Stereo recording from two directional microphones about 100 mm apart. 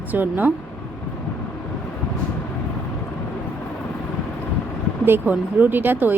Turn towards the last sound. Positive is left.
turn(degrees=-20)  # may be behind; listen again after turning